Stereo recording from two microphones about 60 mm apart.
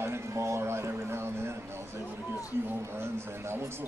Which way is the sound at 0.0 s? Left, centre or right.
Right.